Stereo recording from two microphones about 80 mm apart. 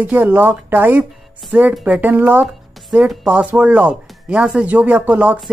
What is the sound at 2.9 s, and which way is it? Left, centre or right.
Speech, centre.